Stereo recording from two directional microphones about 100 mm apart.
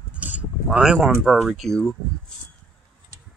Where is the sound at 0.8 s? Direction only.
5° right (ahead or behind).